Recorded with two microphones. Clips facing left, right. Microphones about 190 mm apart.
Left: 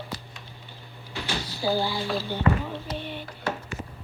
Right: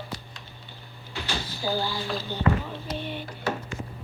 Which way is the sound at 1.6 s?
15° left (ahead or behind).